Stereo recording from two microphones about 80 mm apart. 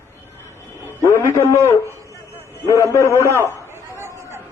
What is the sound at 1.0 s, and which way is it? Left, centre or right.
A man's voice, left.